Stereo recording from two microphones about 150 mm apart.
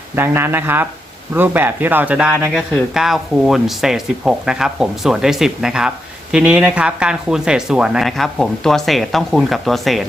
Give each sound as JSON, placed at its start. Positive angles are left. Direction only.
{"t": 0.2, "sound": "speech", "side_deg": -15}